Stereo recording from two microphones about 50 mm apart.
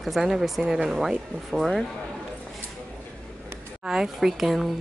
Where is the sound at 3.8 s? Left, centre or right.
Centre.